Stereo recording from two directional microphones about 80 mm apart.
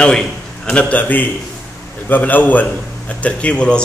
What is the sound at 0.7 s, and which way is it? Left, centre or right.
A man's voice, centre.